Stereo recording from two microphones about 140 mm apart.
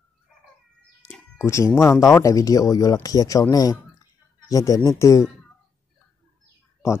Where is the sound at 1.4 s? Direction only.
20° left (ahead or behind).